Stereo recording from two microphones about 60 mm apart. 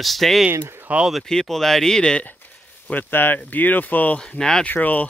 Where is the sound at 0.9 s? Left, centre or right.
Right.